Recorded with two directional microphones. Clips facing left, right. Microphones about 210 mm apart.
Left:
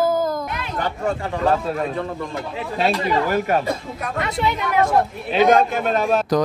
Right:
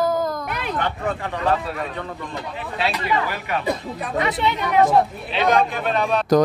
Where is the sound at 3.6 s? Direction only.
Centre (ahead or behind).